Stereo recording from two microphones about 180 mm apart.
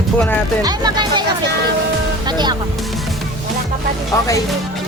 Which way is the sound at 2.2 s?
25° right (ahead or behind).